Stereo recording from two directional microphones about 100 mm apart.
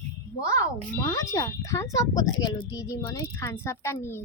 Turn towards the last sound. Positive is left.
turn(degrees=25)  # may be behind; listen again after turning